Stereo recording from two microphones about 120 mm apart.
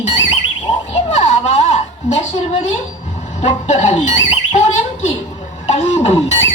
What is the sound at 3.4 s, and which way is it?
Squawk, 75° left (ahead or behind).